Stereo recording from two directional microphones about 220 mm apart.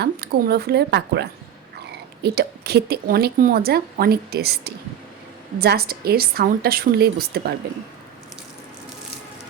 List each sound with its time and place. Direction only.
0.0 s a woman's voice: 45° right (ahead or behind)